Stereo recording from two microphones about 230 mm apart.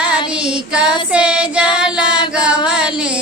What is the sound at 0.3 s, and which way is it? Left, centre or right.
Child singing, centre.